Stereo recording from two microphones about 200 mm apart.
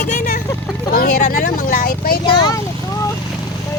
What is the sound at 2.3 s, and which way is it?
Speech, 20° left (ahead or behind).